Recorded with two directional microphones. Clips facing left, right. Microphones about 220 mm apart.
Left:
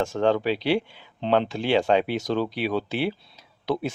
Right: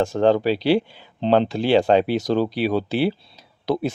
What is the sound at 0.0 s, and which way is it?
Speech, 35° right (ahead or behind).